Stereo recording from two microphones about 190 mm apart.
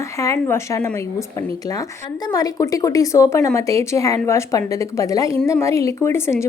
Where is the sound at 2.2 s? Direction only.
20° left (ahead or behind).